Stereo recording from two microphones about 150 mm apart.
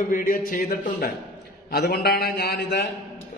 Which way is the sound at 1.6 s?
90° left.